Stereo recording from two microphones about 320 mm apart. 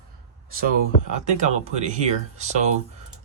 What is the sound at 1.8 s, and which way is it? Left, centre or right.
Speech, right.